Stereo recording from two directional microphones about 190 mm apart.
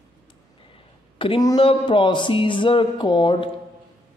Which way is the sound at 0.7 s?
30° left (ahead or behind).